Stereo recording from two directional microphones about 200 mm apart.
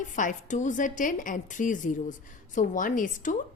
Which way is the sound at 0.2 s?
40° left (ahead or behind).